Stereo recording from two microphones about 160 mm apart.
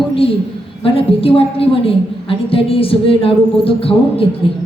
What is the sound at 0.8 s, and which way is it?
A woman's voice, 35° left (ahead or behind).